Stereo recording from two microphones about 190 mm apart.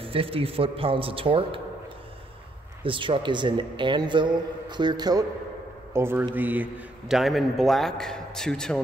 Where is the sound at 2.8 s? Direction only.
25° right (ahead or behind).